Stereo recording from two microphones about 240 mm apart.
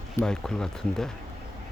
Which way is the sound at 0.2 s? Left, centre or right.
Centre.